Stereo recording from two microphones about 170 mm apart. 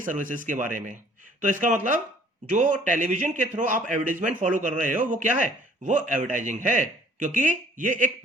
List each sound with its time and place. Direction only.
0.0 s speech: 50° right (ahead or behind)